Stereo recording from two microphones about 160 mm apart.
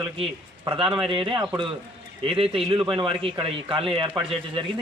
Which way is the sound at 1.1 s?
30° right (ahead or behind).